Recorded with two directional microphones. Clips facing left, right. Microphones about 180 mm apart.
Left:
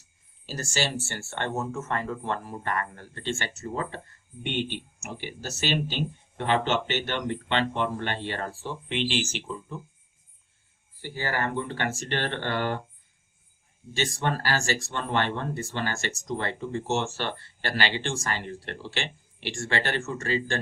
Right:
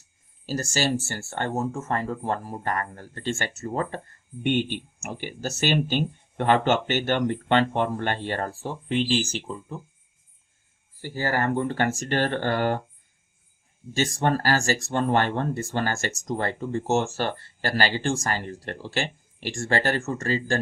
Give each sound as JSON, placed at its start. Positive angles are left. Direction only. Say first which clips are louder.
{"t": 0.4, "sound": "speech", "louder": "right 4 dB", "side_deg": -45}
{"t": 11.0, "sound": "speech", "louder": "right 4 dB", "side_deg": -45}
{"t": 13.9, "sound": "speech", "louder": "right 5 dB", "side_deg": -45}